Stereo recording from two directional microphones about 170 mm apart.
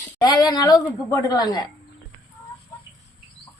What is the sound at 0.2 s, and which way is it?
A woman's voice, 25° left (ahead or behind).